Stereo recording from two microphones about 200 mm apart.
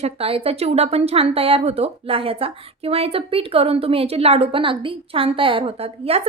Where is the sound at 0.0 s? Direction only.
30° right (ahead or behind).